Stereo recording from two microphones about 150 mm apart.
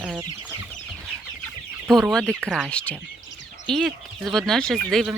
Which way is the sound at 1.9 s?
Centre (ahead or behind).